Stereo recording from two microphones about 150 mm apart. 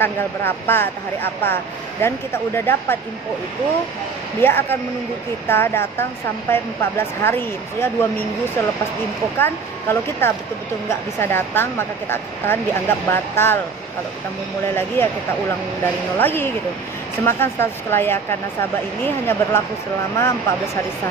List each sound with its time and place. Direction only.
0.7 s speech: 15° left (ahead or behind)
4.4 s speech: 15° left (ahead or behind)
9.4 s speech: 15° left (ahead or behind)
15.0 s speech: 15° left (ahead or behind)
16.2 s speech: 15° left (ahead or behind)